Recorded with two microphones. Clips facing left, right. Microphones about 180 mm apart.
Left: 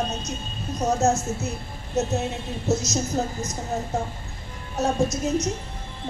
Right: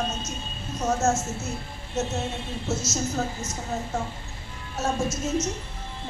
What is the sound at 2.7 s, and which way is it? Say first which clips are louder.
Speech: left 4 dB; 15° left (ahead or behind).